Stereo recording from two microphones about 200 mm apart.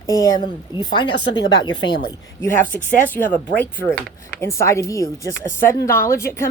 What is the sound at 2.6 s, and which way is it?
Speech, 40° left (ahead or behind).